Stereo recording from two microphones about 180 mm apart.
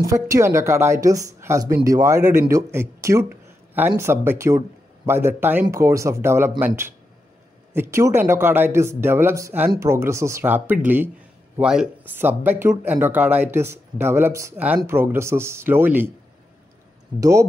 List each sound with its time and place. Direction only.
0.0 s speech: 15° right (ahead or behind)
17.2 s speech: 15° right (ahead or behind)